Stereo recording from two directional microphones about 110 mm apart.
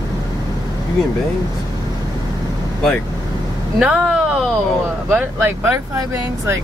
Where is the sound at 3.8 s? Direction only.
10° right (ahead or behind).